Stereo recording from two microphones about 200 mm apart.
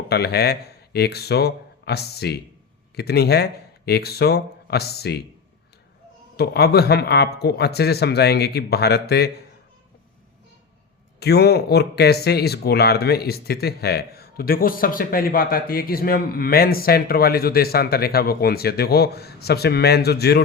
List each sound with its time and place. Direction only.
0.1 s speech: 55° left (ahead or behind)
6.3 s speech: 50° left (ahead or behind)
11.2 s speech: 55° left (ahead or behind)